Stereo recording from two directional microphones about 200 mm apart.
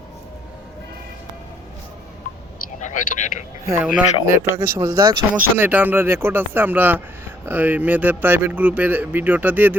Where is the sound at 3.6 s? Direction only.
10° right (ahead or behind).